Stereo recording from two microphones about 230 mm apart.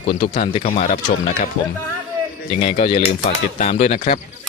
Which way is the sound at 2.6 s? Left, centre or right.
Left.